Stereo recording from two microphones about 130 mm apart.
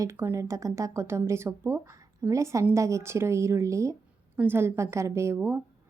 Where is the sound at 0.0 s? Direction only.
20° right (ahead or behind).